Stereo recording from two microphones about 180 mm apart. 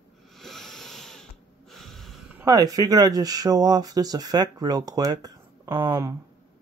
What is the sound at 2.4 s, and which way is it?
Speech, 20° right (ahead or behind).